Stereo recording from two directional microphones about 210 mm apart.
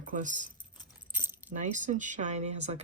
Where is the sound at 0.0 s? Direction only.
35° right (ahead or behind).